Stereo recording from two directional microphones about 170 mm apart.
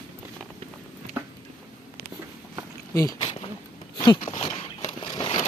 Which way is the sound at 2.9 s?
25° left (ahead or behind).